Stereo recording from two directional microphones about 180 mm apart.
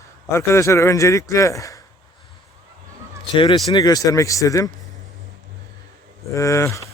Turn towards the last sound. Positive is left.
turn(degrees=15)  # may be behind; listen again after turning